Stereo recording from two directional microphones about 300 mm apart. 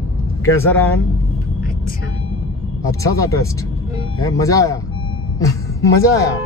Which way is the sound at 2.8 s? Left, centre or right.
Centre.